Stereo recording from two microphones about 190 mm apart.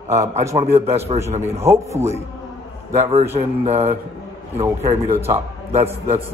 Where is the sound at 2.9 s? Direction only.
35° right (ahead or behind).